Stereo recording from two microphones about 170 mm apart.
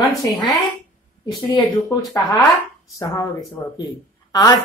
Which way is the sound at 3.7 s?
25° left (ahead or behind).